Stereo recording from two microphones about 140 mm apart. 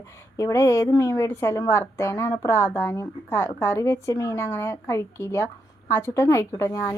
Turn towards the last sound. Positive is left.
turn(degrees=20)  # may be behind; listen again after turning